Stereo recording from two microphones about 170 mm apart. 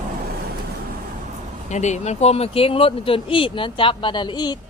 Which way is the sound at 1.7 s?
45° left (ahead or behind).